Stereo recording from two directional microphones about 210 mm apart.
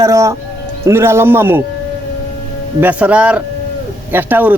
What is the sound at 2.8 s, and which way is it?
A man's voice, 5° right (ahead or behind).